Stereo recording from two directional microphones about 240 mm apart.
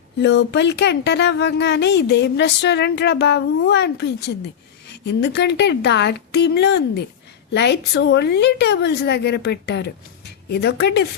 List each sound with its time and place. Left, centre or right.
0.2 s speech: left